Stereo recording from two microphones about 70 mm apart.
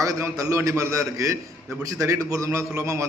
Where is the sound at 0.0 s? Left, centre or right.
Right.